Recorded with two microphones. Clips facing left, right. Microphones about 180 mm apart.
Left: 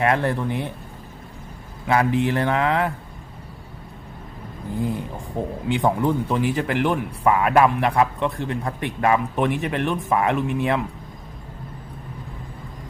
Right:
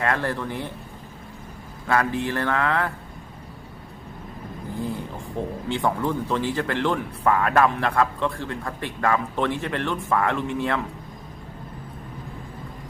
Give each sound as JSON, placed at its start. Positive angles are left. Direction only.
{"t": 0.0, "sound": "a man's voice", "side_deg": 20}
{"t": 1.9, "sound": "a man's voice", "side_deg": 20}
{"t": 4.8, "sound": "speech", "side_deg": 15}